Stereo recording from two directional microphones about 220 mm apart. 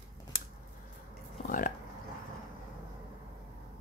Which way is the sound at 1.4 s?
35° left (ahead or behind).